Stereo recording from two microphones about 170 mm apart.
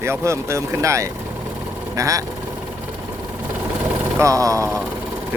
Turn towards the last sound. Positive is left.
turn(degrees=-20)  # may be behind; listen again after turning